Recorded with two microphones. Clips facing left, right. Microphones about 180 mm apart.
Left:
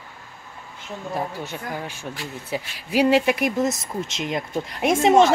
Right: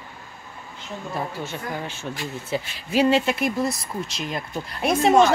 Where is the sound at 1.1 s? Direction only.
10° left (ahead or behind).